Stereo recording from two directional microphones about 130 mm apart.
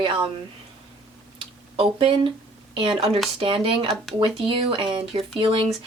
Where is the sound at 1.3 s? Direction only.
45° right (ahead or behind).